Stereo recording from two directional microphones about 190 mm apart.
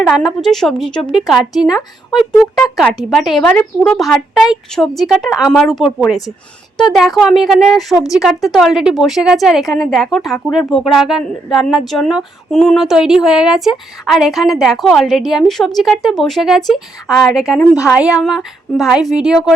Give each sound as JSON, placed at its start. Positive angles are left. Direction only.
{"t": 0.0, "sound": "speech", "side_deg": 0}